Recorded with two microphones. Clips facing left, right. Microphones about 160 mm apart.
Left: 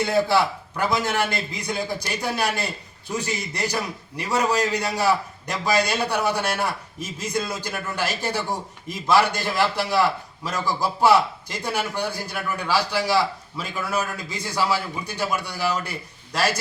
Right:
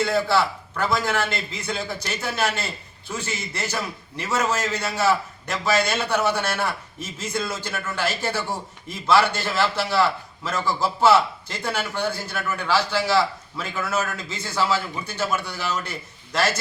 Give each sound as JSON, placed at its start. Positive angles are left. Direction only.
{"t": 0.0, "sound": "a man's voice", "side_deg": 15}